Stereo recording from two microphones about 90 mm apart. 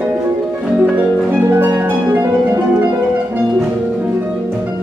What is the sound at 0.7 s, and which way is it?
Music, 15° right (ahead or behind).